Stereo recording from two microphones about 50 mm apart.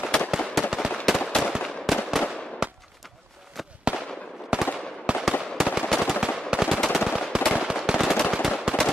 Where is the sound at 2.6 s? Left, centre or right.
Centre.